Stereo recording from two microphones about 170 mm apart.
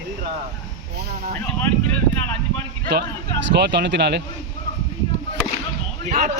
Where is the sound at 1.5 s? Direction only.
10° left (ahead or behind).